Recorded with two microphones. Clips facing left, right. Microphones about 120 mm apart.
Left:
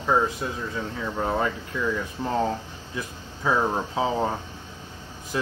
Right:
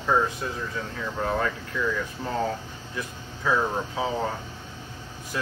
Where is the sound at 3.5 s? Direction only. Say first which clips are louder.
Left 1 dB; 25° left (ahead or behind).